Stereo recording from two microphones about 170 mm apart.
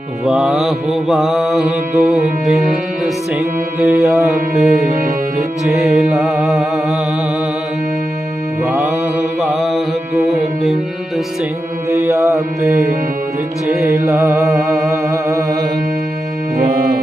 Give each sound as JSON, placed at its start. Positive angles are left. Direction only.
{"t": 0.3, "sound": "mantra", "side_deg": -5}
{"t": 3.3, "sound": "mantra", "side_deg": -15}
{"t": 4.3, "sound": "mantra", "side_deg": 0}
{"t": 5.8, "sound": "mantra", "side_deg": 0}
{"t": 9.4, "sound": "mantra", "side_deg": 0}
{"t": 11.9, "sound": "mantra", "side_deg": -15}